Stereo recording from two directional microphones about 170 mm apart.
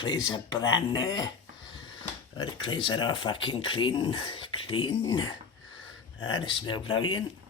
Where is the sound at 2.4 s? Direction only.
25° left (ahead or behind).